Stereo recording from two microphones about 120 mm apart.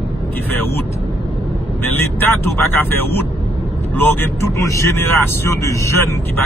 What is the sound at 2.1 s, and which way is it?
Speech, 15° left (ahead or behind).